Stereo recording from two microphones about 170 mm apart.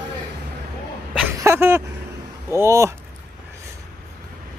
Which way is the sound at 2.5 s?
15° right (ahead or behind).